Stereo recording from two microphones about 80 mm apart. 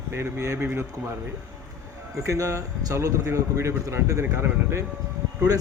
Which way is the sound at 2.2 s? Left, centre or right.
Right.